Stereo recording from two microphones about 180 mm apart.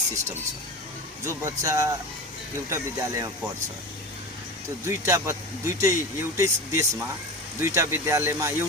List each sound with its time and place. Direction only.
1.2 s speech: 15° right (ahead or behind)
4.9 s speech: 15° right (ahead or behind)